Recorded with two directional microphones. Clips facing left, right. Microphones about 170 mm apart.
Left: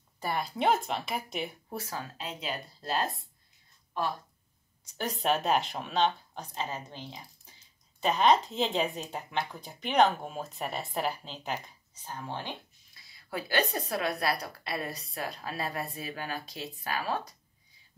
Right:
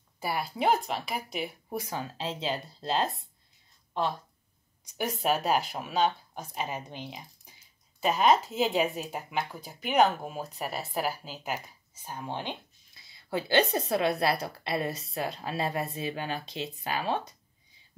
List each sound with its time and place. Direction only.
0.2 s a woman's voice: 5° right (ahead or behind)
1.7 s speech: 15° right (ahead or behind)
4.9 s speech: 5° right (ahead or behind); by 17.2 s 25° right (ahead or behind)